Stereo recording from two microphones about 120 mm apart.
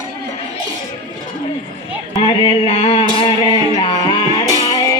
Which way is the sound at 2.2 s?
55° left (ahead or behind).